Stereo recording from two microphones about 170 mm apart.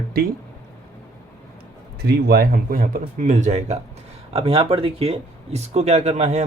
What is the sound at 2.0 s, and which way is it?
Speech, 65° right (ahead or behind).